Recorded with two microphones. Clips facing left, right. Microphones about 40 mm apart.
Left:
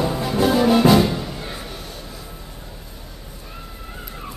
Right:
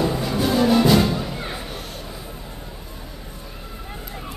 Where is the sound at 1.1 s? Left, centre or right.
Centre.